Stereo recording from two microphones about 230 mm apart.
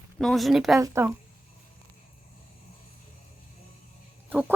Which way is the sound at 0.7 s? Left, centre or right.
Centre.